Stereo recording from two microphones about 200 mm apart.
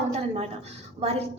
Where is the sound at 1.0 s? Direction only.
30° right (ahead or behind).